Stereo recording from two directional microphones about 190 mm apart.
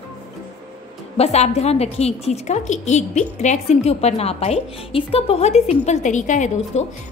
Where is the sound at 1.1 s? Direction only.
35° left (ahead or behind).